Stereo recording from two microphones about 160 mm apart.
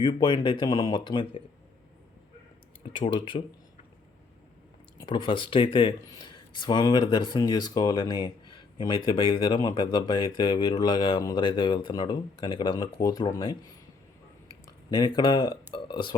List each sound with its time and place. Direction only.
0.0 s speech: 30° left (ahead or behind)
3.1 s speech: 30° left (ahead or behind)
4.9 s speech: 30° left (ahead or behind)
14.8 s speech: 25° left (ahead or behind)